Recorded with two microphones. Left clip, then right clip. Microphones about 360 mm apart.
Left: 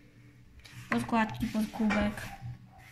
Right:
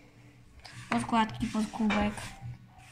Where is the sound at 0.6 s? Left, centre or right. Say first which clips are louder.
Right 1 dB; centre.